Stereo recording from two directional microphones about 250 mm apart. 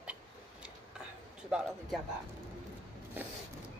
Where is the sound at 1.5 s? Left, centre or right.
Centre.